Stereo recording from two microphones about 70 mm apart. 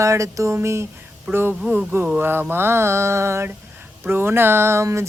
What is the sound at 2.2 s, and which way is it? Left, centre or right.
Speech, right.